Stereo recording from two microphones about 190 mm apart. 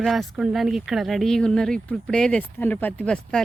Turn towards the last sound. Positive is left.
turn(degrees=5)  # may be behind; listen again after turning